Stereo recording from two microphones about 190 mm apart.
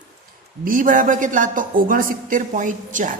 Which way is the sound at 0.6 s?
45° right (ahead or behind).